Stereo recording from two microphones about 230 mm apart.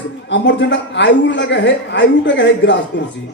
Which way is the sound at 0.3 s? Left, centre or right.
Left.